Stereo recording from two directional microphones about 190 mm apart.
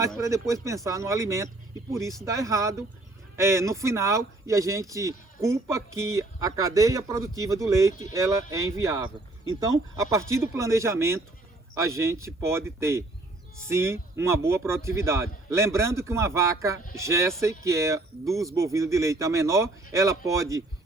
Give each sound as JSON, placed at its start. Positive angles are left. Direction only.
{"t": 0.2, "sound": "speech", "side_deg": -15}